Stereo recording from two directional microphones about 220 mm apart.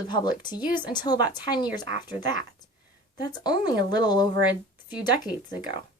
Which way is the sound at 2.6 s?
20° left (ahead or behind).